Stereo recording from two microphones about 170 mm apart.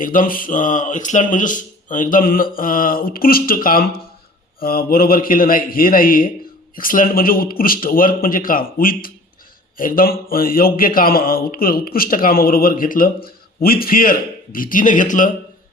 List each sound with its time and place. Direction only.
0.0 s a man's voice: 55° left (ahead or behind)